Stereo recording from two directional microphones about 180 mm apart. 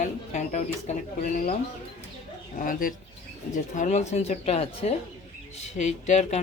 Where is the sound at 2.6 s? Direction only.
50° left (ahead or behind).